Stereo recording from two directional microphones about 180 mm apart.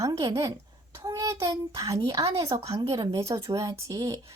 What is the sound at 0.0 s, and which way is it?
A child's voice, 20° right (ahead or behind).